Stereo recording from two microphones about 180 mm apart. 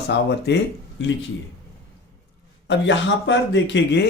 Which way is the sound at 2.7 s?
90° left.